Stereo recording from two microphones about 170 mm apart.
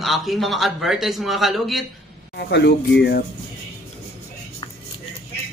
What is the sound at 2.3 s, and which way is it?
Speech, 80° left.